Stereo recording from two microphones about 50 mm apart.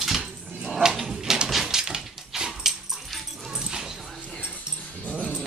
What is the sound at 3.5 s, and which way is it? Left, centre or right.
Dog, centre.